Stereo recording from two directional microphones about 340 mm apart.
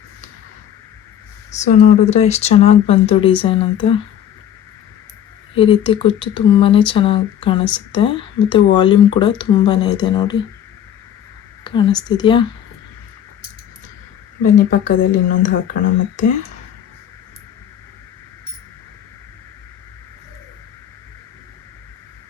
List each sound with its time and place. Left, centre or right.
1.6 s speech: centre
5.5 s speech: centre
11.6 s speech: centre
14.4 s speech: left